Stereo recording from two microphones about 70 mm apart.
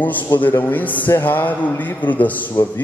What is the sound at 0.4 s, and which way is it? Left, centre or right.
A man's voice, left.